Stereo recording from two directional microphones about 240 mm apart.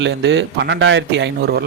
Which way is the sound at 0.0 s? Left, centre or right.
Right.